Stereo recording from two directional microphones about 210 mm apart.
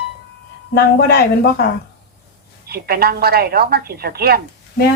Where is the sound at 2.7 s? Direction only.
45° right (ahead or behind).